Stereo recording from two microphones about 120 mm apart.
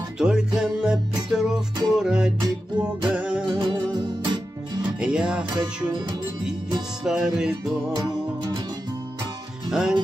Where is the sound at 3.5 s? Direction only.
40° right (ahead or behind).